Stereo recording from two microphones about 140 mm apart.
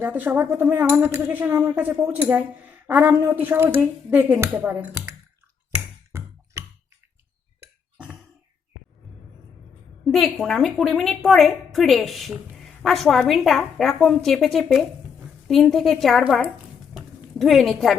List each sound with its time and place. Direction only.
0.0 s speech: 15° right (ahead or behind)
6.1 s a sound: 20° right (ahead or behind)
10.1 s a woman's voice: centre (ahead or behind)